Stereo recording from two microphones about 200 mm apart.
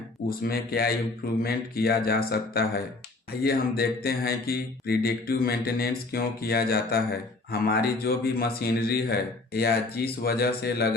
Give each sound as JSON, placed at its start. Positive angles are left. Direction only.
{"t": 0.3, "sound": "speech", "side_deg": 50}